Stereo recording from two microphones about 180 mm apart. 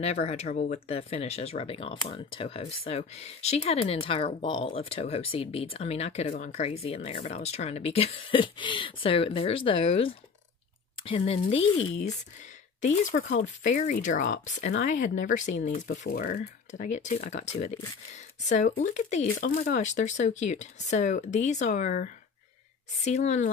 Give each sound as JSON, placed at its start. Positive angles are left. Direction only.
{"t": 0.0, "sound": "speech", "side_deg": 35}
{"t": 12.8, "sound": "speech", "side_deg": 40}